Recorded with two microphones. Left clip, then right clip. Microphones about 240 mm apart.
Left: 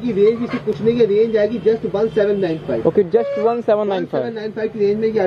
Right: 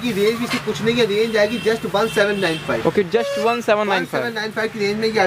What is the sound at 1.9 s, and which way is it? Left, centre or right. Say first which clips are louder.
A man's voice: left 1 dB; right.